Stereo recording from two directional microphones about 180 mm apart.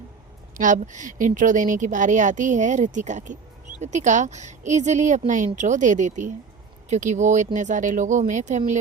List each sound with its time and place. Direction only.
0.5 s speech: 45° right (ahead or behind)